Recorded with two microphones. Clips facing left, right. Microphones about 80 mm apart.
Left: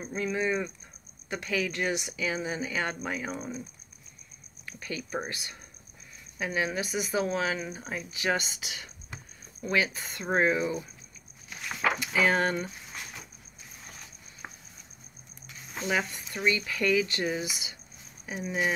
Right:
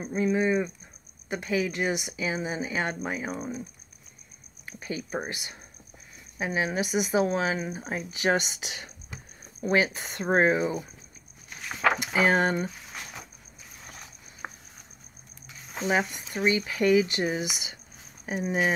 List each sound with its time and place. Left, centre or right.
0.0 s speech: centre
4.6 s speech: right
9.7 s speech: right
12.1 s speech: right
14.4 s a sound: right
15.4 s a sound: right
16.3 s speech: right
18.2 s speech: right